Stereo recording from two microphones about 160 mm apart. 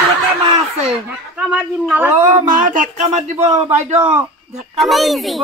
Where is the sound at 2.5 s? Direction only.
55° right (ahead or behind).